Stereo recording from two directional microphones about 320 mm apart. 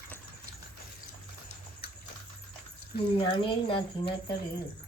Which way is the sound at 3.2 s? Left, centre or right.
Centre.